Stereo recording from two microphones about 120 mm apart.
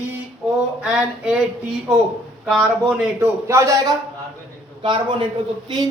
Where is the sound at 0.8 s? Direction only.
5° right (ahead or behind).